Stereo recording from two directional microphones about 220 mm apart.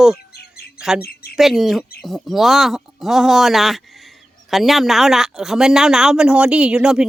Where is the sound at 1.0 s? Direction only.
45° left (ahead or behind).